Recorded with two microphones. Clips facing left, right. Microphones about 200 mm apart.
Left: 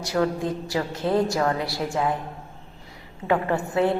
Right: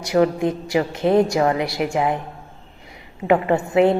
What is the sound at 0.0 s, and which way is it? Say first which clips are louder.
A woman's voice: right 6 dB; 15° right (ahead or behind).